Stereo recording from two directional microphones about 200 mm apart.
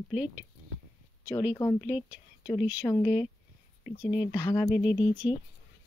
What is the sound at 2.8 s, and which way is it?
Speech, 15° left (ahead or behind).